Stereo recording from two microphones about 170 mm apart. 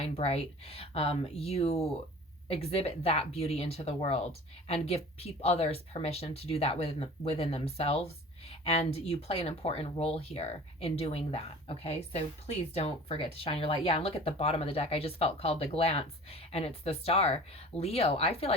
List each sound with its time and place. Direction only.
0.0 s speech: 35° left (ahead or behind)